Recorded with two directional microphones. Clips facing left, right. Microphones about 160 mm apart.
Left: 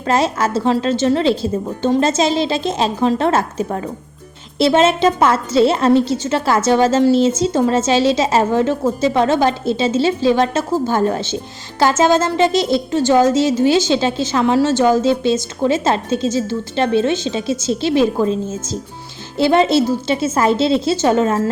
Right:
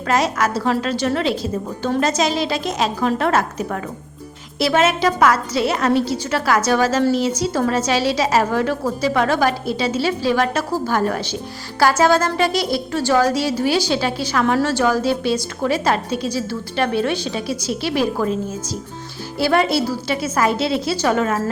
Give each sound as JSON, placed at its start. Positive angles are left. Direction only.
{"t": 0.0, "sound": "a woman's voice", "side_deg": 30}